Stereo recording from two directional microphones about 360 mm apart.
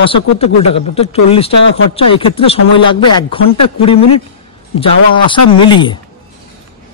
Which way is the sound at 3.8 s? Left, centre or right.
Centre.